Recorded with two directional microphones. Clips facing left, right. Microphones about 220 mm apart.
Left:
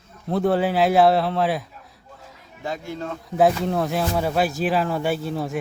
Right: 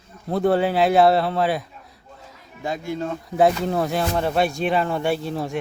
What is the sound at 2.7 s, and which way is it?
Speech, 15° right (ahead or behind).